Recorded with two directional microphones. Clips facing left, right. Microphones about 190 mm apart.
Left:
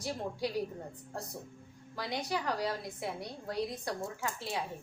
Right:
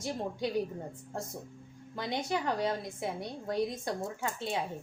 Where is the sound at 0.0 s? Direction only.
25° right (ahead or behind).